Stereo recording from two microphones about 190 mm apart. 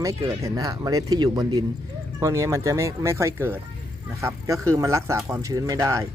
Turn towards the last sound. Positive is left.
turn(degrees=-15)  # may be behind; listen again after turning